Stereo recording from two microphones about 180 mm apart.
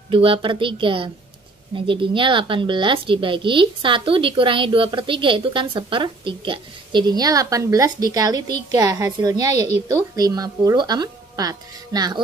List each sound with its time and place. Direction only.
0.1 s a woman's voice: 30° right (ahead or behind)